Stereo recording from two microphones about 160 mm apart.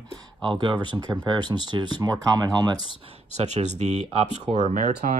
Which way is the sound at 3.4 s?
45° right (ahead or behind).